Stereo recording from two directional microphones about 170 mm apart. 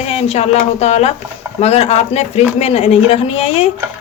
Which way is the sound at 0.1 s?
40° left (ahead or behind).